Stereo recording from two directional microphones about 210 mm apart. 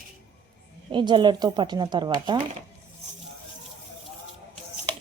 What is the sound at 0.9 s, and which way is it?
Speech, 20° right (ahead or behind).